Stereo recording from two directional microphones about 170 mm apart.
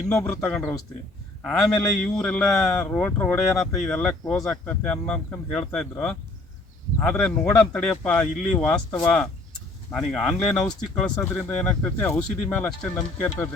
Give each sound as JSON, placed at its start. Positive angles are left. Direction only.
{"t": 0.1, "sound": "speech", "side_deg": 5}